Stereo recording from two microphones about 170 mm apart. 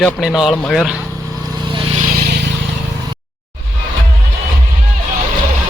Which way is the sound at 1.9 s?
55° right (ahead or behind).